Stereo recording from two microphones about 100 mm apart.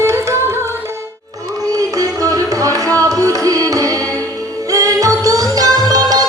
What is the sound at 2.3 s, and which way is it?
Music, 35° right (ahead or behind).